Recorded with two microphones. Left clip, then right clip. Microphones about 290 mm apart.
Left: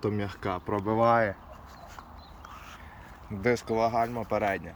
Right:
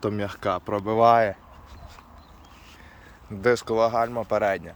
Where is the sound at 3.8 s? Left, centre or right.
Right.